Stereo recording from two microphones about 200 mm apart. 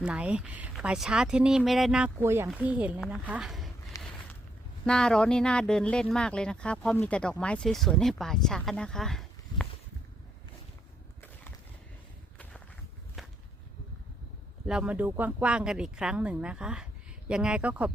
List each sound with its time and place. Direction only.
0.0 s speech: 5° right (ahead or behind)
3.9 s a sound: 15° left (ahead or behind)
4.9 s speech: 5° left (ahead or behind)
13.2 s whip: centre (ahead or behind)
14.7 s speech: 5° right (ahead or behind)